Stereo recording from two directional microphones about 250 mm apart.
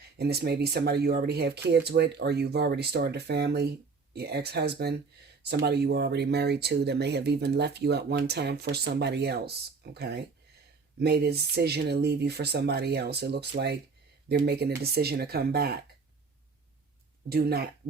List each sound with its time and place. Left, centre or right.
0.2 s speech: right
17.2 s speech: right